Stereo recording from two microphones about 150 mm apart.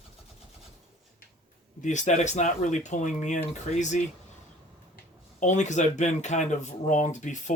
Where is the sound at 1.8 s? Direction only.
55° left (ahead or behind).